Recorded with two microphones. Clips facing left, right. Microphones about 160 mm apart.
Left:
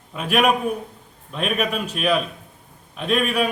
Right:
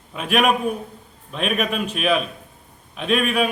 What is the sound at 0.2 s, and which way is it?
A man's voice, centre (ahead or behind).